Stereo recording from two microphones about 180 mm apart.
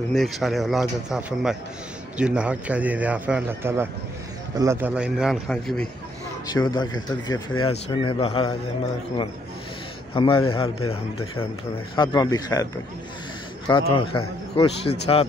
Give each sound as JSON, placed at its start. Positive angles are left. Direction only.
{"t": 0.1, "sound": "a man's voice", "side_deg": 0}
{"t": 6.5, "sound": "a man's voice", "side_deg": 25}
{"t": 10.1, "sound": "a man's voice", "side_deg": 30}
{"t": 13.7, "sound": "a man's voice", "side_deg": 30}